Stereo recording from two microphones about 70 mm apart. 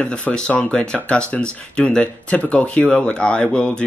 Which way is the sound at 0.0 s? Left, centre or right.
Centre.